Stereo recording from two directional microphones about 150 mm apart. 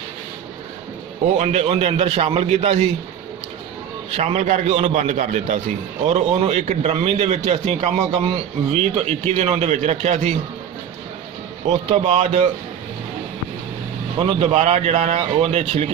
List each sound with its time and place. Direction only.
1.4 s a man's voice: 45° right (ahead or behind)
4.1 s a man's voice: 45° right (ahead or behind)
11.9 s a man's voice: 45° right (ahead or behind)
14.2 s a man's voice: 40° right (ahead or behind)